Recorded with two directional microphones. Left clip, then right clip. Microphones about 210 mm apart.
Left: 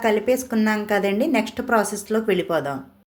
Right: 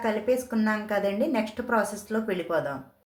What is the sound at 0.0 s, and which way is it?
A woman's voice, 35° left (ahead or behind).